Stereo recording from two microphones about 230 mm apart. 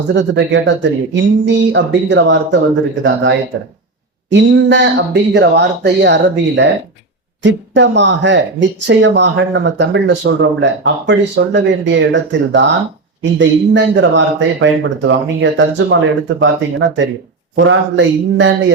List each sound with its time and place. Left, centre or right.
0.1 s speech: right
4.3 s speech: right